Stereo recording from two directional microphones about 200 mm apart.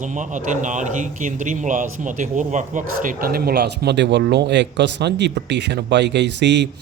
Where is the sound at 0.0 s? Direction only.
40° right (ahead or behind).